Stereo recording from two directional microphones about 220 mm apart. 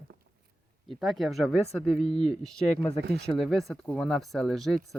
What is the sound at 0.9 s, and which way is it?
Speech, centre (ahead or behind).